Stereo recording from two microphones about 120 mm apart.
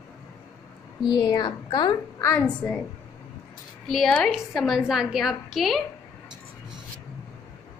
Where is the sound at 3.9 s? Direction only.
Centre (ahead or behind).